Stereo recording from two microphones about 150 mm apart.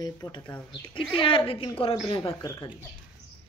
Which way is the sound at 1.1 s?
35° left (ahead or behind).